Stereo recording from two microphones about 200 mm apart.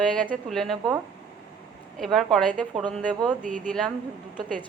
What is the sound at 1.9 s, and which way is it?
Speech, centre (ahead or behind).